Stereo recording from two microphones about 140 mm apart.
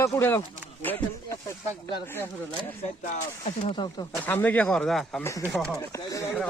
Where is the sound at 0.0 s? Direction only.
20° left (ahead or behind).